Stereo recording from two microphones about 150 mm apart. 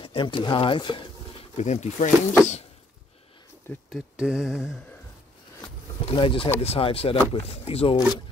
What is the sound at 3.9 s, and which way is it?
Mantra, 5° right (ahead or behind).